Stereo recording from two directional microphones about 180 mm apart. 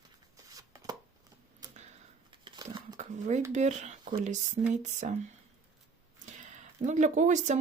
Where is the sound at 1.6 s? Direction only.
20° right (ahead or behind).